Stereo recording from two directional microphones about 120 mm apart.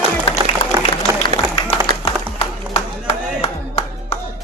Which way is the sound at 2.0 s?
60° left (ahead or behind).